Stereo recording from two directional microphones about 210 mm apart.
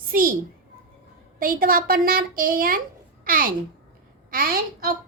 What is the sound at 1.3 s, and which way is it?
A child's voice, 45° right (ahead or behind).